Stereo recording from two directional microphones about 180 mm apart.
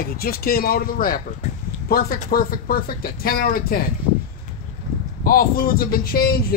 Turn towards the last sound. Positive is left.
turn(degrees=55)  # may be behind; listen again after turning